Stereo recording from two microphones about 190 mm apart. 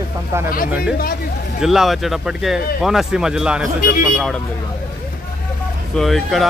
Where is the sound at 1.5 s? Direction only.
Centre (ahead or behind).